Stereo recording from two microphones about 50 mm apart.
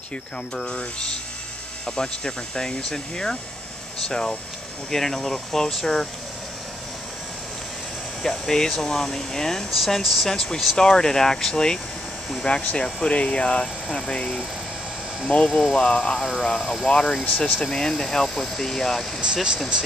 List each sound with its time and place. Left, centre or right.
0.7 s speech: centre
8.2 s speech: centre
10.3 s speech: centre
15.4 s speech: centre
16.9 s speech: centre
19.2 s speech: centre